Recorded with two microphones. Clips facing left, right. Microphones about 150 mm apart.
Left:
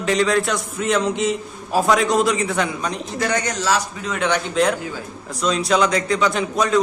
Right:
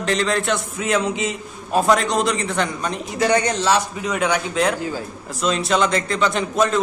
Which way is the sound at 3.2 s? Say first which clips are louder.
Right 4 dB; 25° right (ahead or behind).